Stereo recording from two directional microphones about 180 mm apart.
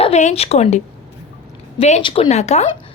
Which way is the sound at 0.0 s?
40° left (ahead or behind).